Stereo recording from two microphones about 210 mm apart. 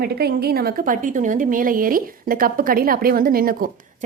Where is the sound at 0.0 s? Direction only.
50° right (ahead or behind).